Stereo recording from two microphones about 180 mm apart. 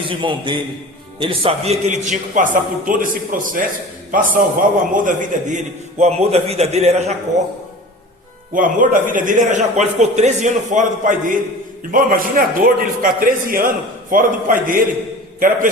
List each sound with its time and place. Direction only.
0.0 s a man's voice: 30° right (ahead or behind)
8.5 s a man's voice: 50° right (ahead or behind)